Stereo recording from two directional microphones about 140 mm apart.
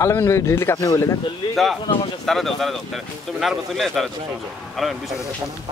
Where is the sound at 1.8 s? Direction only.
40° left (ahead or behind).